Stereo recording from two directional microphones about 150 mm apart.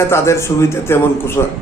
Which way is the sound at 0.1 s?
20° left (ahead or behind).